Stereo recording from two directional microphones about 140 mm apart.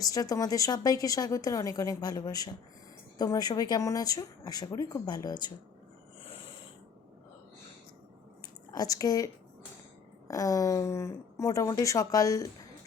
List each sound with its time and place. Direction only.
0.0 s a woman's voice: 25° left (ahead or behind)
8.7 s a woman's voice: 25° left (ahead or behind)